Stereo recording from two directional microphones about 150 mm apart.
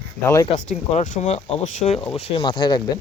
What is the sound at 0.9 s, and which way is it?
Speech, 50° left (ahead or behind).